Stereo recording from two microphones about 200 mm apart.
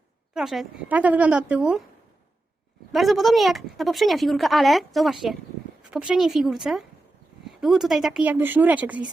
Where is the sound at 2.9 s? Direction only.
Centre (ahead or behind).